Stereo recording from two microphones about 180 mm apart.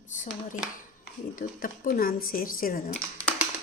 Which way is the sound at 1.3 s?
55° left (ahead or behind).